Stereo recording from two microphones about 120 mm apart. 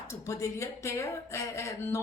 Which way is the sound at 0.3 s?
25° left (ahead or behind).